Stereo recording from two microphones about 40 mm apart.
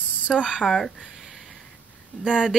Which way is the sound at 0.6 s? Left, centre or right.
Centre.